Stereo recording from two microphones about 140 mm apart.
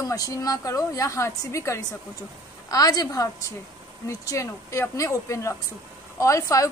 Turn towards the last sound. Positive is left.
turn(degrees=25)  # may be behind; listen again after turning